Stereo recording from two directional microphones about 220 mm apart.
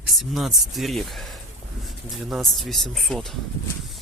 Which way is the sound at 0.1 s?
Centre (ahead or behind).